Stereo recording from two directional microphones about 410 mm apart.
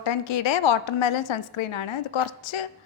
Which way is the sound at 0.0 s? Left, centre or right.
Left.